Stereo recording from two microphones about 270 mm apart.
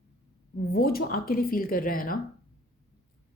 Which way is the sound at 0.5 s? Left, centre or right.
Left.